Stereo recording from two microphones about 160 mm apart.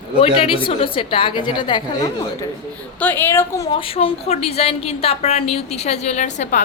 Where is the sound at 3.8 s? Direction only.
35° left (ahead or behind).